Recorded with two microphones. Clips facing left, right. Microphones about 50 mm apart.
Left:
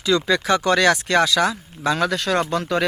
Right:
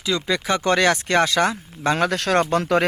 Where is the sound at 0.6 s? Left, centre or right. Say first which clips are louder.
Right 2 dB; right.